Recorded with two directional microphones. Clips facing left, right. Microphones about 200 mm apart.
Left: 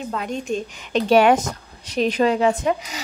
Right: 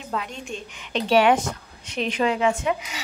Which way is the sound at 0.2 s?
45° left (ahead or behind).